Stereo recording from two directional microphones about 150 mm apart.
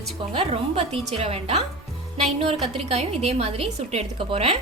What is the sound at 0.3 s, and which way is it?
A woman's voice, 40° right (ahead or behind).